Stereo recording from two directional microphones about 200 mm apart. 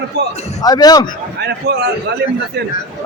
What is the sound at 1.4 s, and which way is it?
Speech, 55° right (ahead or behind).